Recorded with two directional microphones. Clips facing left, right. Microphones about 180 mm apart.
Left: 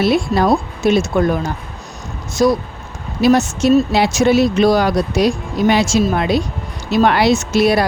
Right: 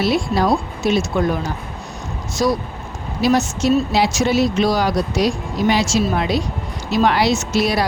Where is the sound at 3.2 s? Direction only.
55° left (ahead or behind).